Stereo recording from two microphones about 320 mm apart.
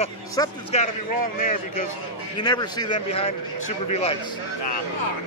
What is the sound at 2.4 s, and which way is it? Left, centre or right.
Speech, centre.